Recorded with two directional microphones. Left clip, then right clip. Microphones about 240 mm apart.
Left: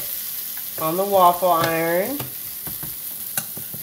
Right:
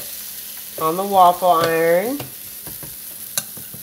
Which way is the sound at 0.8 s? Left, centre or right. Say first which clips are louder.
Right 3 dB; right.